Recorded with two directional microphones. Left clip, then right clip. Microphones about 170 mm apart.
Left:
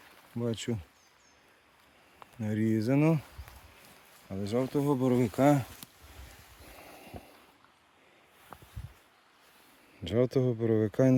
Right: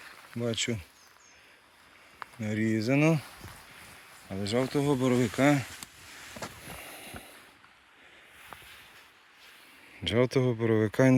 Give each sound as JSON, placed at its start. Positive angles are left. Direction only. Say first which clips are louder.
{"t": 0.4, "sound": "speech", "louder": "right 4 dB", "side_deg": 35}
{"t": 2.4, "sound": "speech", "louder": "right 1 dB", "side_deg": 40}
{"t": 3.0, "sound": "speech", "louder": "right 3 dB", "side_deg": 15}
{"t": 4.4, "sound": "speech", "louder": "right 2 dB", "side_deg": 5}
{"t": 6.8, "sound": "a sound", "louder": "right 4 dB", "side_deg": 10}
{"t": 10.0, "sound": "speech", "louder": "right 2 dB", "side_deg": 10}